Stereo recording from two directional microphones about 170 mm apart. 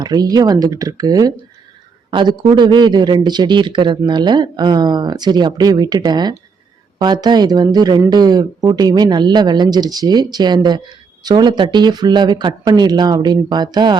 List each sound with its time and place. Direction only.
0.0 s speech: 25° right (ahead or behind)